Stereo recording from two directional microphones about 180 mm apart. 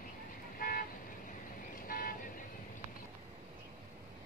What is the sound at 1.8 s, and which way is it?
Vehicle, 50° left (ahead or behind).